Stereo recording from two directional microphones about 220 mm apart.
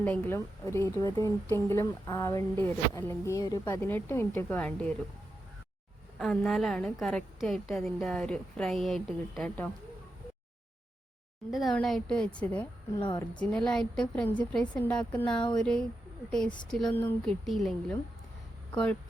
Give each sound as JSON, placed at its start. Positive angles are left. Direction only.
{"t": 0.0, "sound": "a woman's voice", "side_deg": 10}
{"t": 6.1, "sound": "a woman's voice", "side_deg": 0}
{"t": 11.5, "sound": "a woman's voice", "side_deg": 0}
{"t": 13.0, "sound": "a woman's voice", "side_deg": 20}
{"t": 13.4, "sound": "a woman's voice", "side_deg": 5}